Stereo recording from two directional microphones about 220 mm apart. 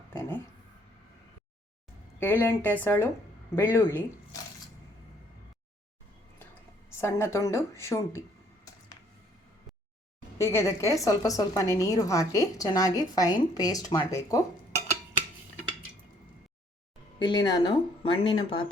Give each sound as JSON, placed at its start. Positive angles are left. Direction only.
{"t": 0.1, "sound": "speech", "side_deg": 10}
{"t": 2.1, "sound": "a woman's voice", "side_deg": 10}
{"t": 7.0, "sound": "a woman's voice", "side_deg": 15}
{"t": 10.3, "sound": "a woman's voice", "side_deg": 10}
{"t": 17.2, "sound": "a woman's voice", "side_deg": 20}